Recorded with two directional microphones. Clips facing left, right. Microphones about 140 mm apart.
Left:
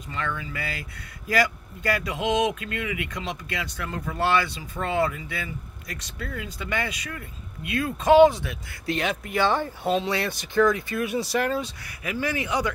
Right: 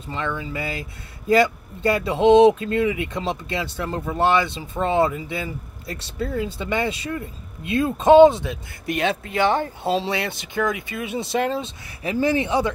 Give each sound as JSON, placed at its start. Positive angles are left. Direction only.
{"t": 0.1, "sound": "speech", "side_deg": -25}